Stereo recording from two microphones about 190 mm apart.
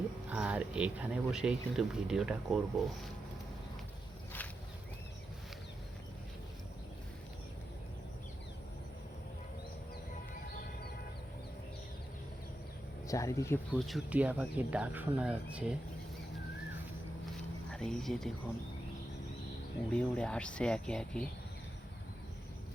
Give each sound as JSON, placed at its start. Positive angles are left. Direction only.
{"t": 0.3, "sound": "speech", "side_deg": -5}
{"t": 13.1, "sound": "speech", "side_deg": 15}
{"t": 13.7, "sound": "speech", "side_deg": 0}
{"t": 17.7, "sound": "speech", "side_deg": 5}
{"t": 19.9, "sound": "speech", "side_deg": 5}